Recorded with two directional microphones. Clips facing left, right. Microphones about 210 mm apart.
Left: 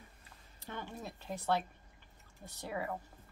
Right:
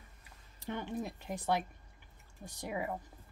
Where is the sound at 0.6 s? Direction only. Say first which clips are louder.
Right 7 dB; 15° right (ahead or behind).